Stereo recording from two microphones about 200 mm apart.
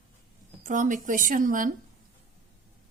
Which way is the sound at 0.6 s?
40° right (ahead or behind).